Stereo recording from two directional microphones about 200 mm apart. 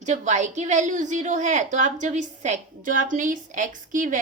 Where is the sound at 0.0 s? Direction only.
35° right (ahead or behind).